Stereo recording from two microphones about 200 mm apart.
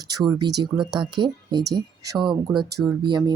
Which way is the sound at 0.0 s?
20° right (ahead or behind).